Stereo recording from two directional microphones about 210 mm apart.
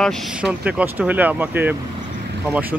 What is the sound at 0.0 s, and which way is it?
Speech, centre (ahead or behind).